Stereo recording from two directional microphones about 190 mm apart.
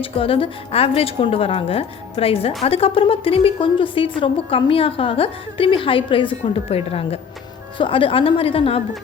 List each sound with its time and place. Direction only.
0.0 s a woman's voice: 30° left (ahead or behind)